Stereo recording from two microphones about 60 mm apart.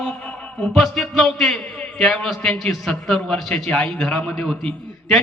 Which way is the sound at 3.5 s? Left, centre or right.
Centre.